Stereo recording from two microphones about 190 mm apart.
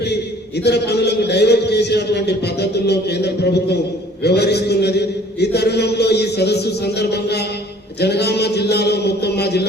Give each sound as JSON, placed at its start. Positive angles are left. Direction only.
{"t": 0.6, "sound": "a man's voice", "side_deg": 60}